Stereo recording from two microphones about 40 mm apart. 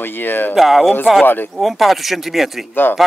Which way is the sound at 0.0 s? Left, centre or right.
Left.